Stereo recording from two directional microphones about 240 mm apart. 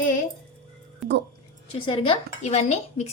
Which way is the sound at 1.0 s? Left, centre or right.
Centre.